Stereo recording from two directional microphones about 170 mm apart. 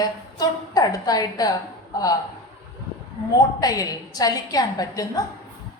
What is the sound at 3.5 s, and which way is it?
A woman's voice, 20° left (ahead or behind).